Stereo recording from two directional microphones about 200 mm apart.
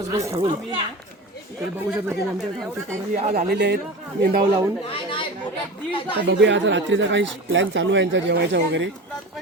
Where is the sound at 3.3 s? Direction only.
50° right (ahead or behind).